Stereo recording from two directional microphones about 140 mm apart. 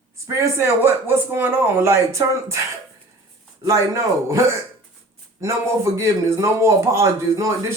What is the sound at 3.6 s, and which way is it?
Speech, 20° right (ahead or behind).